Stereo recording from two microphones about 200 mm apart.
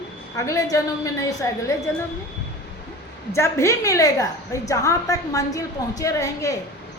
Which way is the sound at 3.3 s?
15° left (ahead or behind).